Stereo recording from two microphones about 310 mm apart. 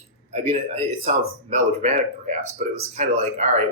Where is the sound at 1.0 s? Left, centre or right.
Right.